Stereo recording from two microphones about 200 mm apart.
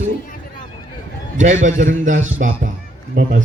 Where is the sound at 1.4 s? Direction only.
40° right (ahead or behind).